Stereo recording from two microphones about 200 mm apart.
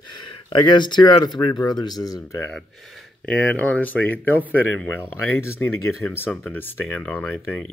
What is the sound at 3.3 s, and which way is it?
Speech, 5° left (ahead or behind).